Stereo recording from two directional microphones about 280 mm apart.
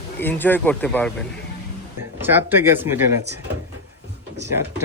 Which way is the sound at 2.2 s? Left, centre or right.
Centre.